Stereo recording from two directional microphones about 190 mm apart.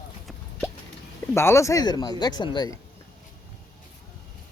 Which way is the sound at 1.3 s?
15° left (ahead or behind).